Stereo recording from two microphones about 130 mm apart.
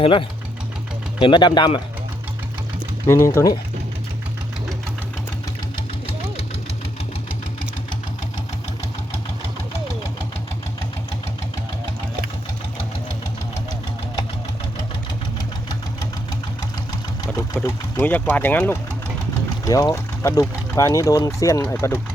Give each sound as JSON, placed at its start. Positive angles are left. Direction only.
{"t": 0.0, "sound": "speech", "side_deg": 40}
{"t": 3.1, "sound": "speech", "side_deg": 20}
{"t": 17.6, "sound": "speech", "side_deg": 20}
{"t": 19.6, "sound": "speech", "side_deg": 25}